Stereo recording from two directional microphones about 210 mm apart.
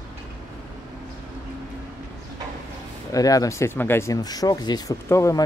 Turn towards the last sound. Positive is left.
turn(degrees=15)  # may be behind; listen again after turning